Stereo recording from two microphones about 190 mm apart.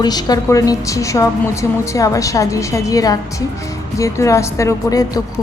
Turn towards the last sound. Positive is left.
turn(degrees=15)  # may be behind; listen again after turning